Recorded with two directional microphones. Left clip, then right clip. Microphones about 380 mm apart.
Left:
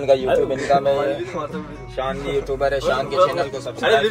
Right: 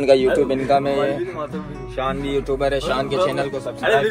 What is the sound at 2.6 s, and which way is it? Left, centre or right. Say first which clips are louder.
Speech: left 3 dB; right.